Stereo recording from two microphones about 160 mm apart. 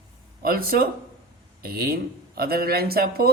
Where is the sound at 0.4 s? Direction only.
65° right (ahead or behind).